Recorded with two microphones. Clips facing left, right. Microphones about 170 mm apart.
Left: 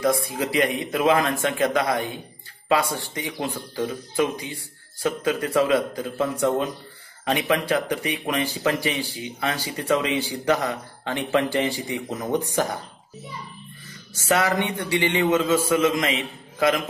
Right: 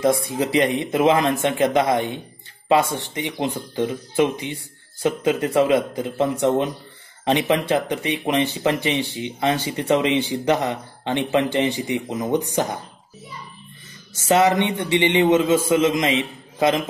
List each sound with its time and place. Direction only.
0.0 s speech: 25° right (ahead or behind)
14.1 s speech: 20° right (ahead or behind)